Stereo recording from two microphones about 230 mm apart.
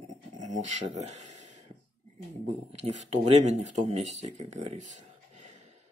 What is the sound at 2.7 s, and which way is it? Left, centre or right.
Speech, right.